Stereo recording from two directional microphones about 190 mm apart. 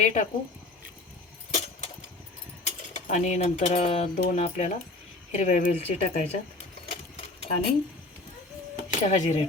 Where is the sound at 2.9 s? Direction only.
40° left (ahead or behind).